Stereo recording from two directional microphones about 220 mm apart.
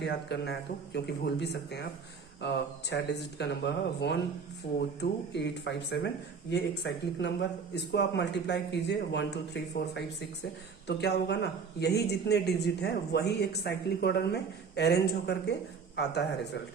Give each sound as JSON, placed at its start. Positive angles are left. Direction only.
{"t": 0.0, "sound": "speech", "side_deg": 50}